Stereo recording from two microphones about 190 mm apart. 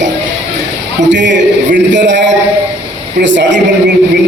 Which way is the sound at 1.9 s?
70° right (ahead or behind).